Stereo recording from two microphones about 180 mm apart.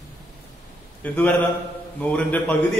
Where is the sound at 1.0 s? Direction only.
10° left (ahead or behind).